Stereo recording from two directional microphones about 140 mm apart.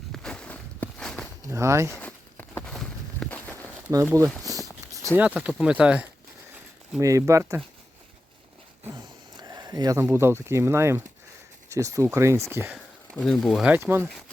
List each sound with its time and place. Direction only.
0.1 s walk: 5° left (ahead or behind)
1.5 s speech: 20° right (ahead or behind)
2.0 s a sound: 10° left (ahead or behind)
3.8 s speech: 20° right (ahead or behind)
4.5 s a sound: 25° right (ahead or behind)
5.0 s speech: 10° right (ahead or behind)
7.0 s speech: 20° right (ahead or behind)
9.4 s speech: 30° right (ahead or behind)
13.1 s speech: 5° left (ahead or behind)
13.7 s speech: 10° right (ahead or behind)